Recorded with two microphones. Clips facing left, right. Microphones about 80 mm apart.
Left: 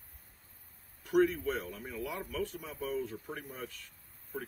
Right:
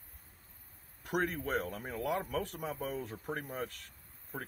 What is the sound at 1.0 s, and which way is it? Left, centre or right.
Speech, right.